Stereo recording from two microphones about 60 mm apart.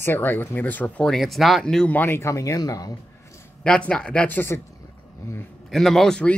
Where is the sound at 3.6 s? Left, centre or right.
Centre.